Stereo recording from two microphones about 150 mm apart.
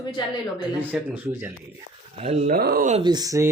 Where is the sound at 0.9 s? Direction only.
5° right (ahead or behind).